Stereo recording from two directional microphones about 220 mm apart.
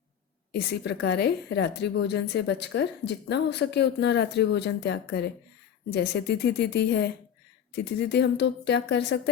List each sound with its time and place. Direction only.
0.5 s a woman's voice: 50° left (ahead or behind)